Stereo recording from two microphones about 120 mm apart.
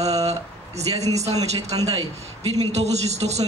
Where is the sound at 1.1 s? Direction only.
65° right (ahead or behind).